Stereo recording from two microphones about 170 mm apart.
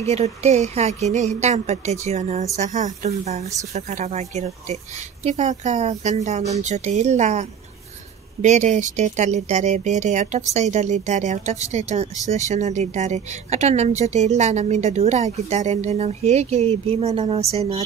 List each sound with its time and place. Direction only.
0.0 s a woman's voice: 40° right (ahead or behind)